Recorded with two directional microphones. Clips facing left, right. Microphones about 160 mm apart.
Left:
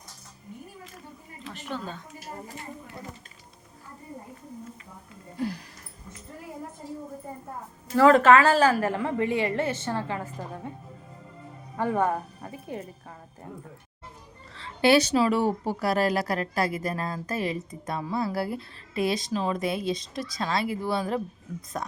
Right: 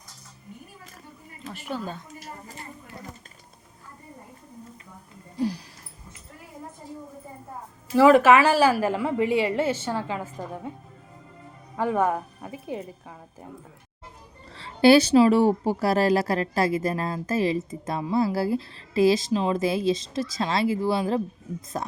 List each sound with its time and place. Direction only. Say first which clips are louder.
1.5 s a woman's voice: right 3 dB; 10° right (ahead or behind)
7.9 s a woman's voice: right 1 dB; 10° right (ahead or behind)
11.8 s a woman's voice: right 2 dB; 10° right (ahead or behind)
14.5 s a woman's voice: right 4 dB; 35° right (ahead or behind)